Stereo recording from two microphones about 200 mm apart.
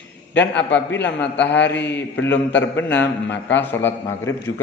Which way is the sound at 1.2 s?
5° left (ahead or behind).